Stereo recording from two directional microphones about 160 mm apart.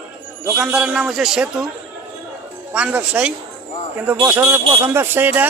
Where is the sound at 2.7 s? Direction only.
10° right (ahead or behind).